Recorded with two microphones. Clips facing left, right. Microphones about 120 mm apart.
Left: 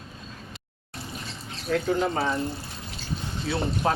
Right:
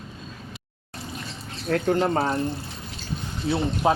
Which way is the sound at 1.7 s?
50° right (ahead or behind).